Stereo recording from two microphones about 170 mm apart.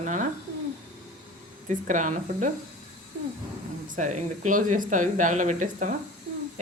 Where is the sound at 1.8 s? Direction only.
50° right (ahead or behind).